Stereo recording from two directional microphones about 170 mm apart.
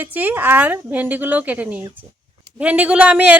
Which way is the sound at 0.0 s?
10° right (ahead or behind).